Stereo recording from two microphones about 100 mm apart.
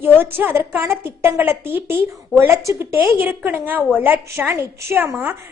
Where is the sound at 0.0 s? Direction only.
20° right (ahead or behind).